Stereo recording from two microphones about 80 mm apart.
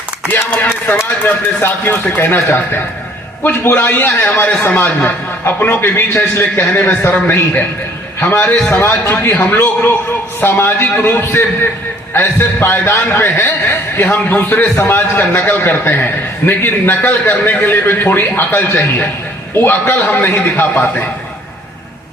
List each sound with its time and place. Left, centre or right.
1.3 s a man's voice: left
6.7 s a man's voice: left